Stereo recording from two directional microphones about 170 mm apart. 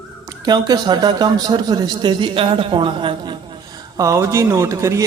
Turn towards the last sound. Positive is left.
turn(degrees=-20)  # may be behind; listen again after turning